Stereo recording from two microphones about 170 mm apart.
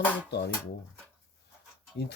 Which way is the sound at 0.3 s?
80° left.